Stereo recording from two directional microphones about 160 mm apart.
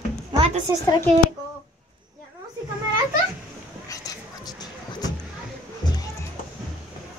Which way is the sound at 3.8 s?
25° left (ahead or behind).